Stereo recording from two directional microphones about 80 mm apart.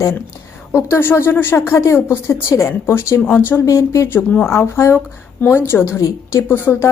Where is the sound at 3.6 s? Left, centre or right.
Left.